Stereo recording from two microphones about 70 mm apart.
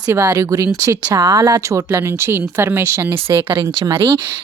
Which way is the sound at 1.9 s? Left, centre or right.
Right.